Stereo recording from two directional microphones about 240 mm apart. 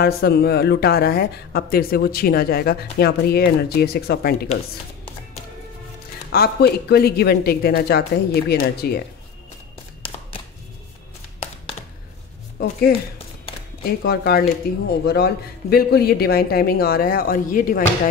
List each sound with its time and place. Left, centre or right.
0.0 s a woman's voice: left
6.3 s a woman's voice: left
13.8 s a woman's voice: left